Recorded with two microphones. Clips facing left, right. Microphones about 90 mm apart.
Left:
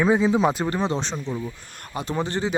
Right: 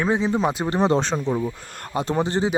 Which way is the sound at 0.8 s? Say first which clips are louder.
Right 6 dB; 45° right (ahead or behind).